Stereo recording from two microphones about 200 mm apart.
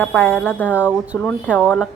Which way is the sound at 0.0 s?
5° left (ahead or behind).